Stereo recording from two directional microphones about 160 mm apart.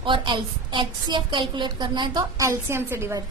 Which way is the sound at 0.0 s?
30° right (ahead or behind).